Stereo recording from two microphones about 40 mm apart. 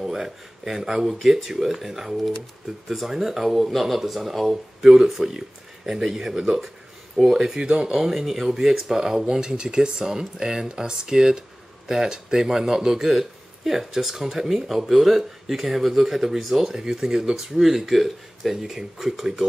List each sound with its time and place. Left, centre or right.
0.0 s speech: centre